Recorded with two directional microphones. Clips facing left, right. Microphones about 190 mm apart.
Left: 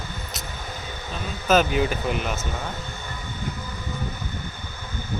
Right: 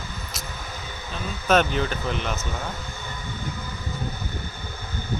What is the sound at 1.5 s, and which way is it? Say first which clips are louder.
Speech: left 1 dB; 5° left (ahead or behind).